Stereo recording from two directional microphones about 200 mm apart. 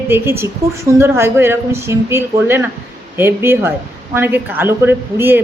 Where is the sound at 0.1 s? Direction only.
10° right (ahead or behind).